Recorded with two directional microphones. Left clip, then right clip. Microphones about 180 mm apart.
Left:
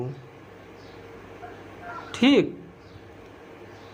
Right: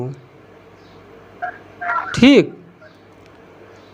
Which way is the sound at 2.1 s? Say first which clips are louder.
Right 8 dB; 25° right (ahead or behind).